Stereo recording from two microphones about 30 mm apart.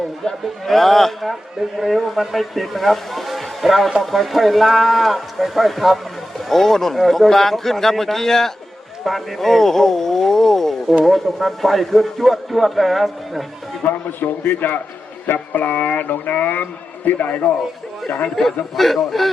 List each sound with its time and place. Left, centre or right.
0.6 s speech: centre
13.8 s a sound: left
17.1 s a man's voice: left
18.8 s speech: centre